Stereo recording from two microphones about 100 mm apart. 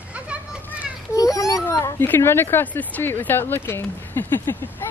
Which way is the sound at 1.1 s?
35° left (ahead or behind).